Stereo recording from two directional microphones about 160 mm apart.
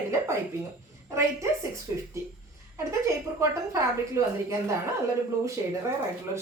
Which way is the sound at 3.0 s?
15° right (ahead or behind).